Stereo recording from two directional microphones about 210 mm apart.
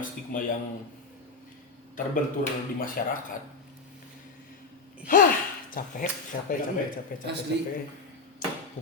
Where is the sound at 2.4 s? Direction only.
40° left (ahead or behind).